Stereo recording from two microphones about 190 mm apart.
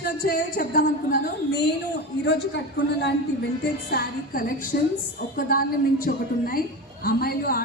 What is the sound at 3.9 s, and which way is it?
A woman's voice, 50° left (ahead or behind).